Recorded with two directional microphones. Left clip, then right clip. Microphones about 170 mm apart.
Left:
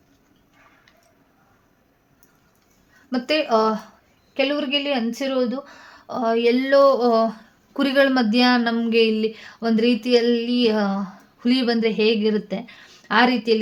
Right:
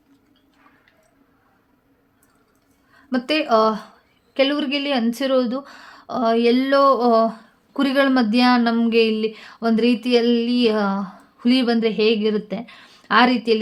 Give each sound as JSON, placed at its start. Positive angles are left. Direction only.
{"t": 3.1, "sound": "speech", "side_deg": -25}